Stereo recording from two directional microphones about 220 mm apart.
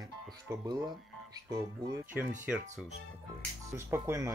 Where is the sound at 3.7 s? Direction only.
10° right (ahead or behind).